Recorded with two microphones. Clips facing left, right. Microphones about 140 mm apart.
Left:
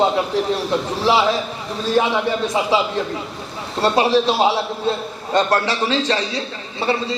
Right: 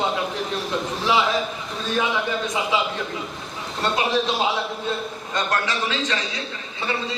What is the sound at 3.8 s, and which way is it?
A man's voice, 30° left (ahead or behind).